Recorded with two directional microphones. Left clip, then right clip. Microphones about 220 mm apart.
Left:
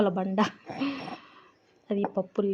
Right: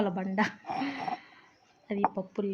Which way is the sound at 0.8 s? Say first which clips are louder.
Left 4 dB; 10° left (ahead or behind).